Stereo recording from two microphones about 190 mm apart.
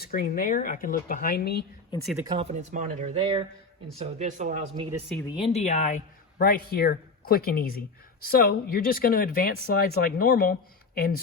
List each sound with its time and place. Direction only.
0.0 s speech: 50° left (ahead or behind)
2.1 s speech: 25° right (ahead or behind); by 4.5 s 40° right (ahead or behind)
4.8 s speech: 30° right (ahead or behind)
5.3 s speech: 30° left (ahead or behind)
6.4 s speech: 55° left (ahead or behind)